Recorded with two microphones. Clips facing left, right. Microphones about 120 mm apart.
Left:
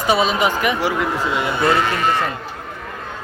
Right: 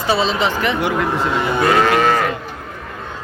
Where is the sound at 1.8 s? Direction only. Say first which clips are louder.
Right 5 dB; 85° right.